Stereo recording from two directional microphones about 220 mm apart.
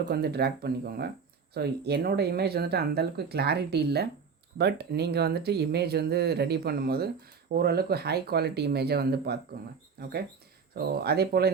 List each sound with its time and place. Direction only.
0.1 s speech: 45° right (ahead or behind)